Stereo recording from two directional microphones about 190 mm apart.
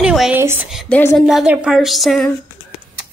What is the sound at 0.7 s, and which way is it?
Speech, centre (ahead or behind).